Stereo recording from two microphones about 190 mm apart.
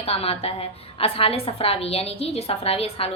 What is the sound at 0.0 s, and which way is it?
A woman's voice, 30° left (ahead or behind).